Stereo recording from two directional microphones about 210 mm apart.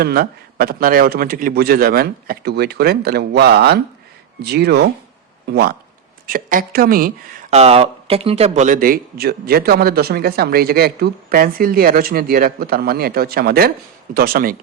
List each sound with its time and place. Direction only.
0.0 s speech: 45° right (ahead or behind)
7.5 s speech: 30° right (ahead or behind)